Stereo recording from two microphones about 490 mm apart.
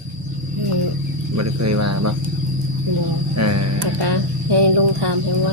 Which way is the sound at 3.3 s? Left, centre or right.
Right.